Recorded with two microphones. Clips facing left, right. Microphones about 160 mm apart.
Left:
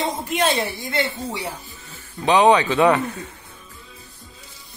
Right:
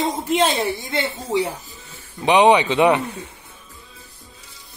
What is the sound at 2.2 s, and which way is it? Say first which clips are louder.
Speech: right 1 dB; 15° right (ahead or behind).